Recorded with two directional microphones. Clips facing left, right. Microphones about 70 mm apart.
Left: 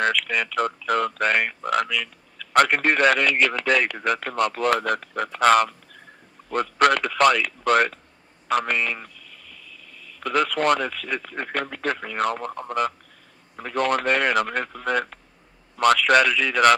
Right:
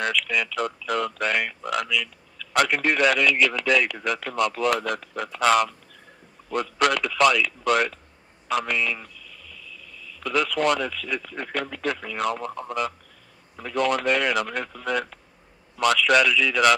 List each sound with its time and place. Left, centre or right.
0.0 s a man's voice: left